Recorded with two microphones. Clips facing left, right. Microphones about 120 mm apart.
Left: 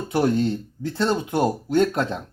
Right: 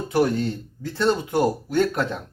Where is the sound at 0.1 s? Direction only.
25° left (ahead or behind).